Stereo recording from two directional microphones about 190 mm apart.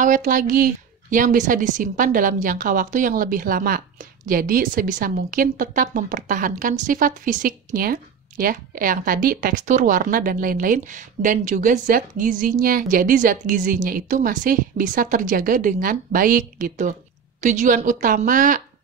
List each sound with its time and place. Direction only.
0.0 s a woman's voice: 45° right (ahead or behind)